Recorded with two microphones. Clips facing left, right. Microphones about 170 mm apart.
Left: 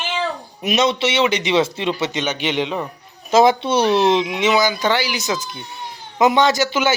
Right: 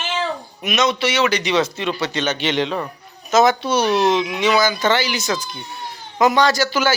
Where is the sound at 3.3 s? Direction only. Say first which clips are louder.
Left 2 dB; 25° left (ahead or behind).